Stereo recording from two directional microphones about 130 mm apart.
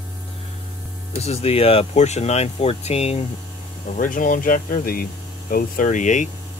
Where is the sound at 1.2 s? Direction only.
55° left (ahead or behind).